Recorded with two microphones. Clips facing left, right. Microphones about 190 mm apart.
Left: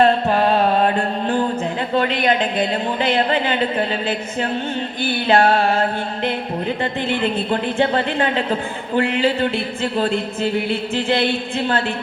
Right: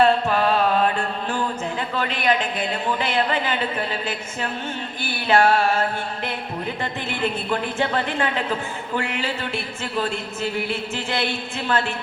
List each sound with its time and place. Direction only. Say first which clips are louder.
0.0 s mantra: left 3 dB; 35° left (ahead or behind)
2.0 s speech: left 5 dB; 35° left (ahead or behind)
5.3 s speech: left 2 dB; 30° left (ahead or behind)
10.7 s speech: left 7 dB; 30° left (ahead or behind)